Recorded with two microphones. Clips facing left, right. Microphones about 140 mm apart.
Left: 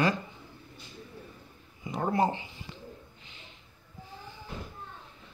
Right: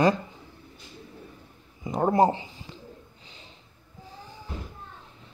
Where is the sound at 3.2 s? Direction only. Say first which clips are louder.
Right 2 dB; 35° right (ahead or behind).